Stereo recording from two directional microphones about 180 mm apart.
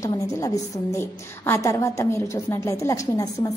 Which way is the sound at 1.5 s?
15° left (ahead or behind).